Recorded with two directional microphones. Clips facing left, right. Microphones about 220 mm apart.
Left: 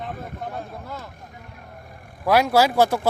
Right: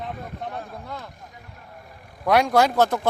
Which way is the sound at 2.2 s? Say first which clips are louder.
Left 1 dB; 5° left (ahead or behind).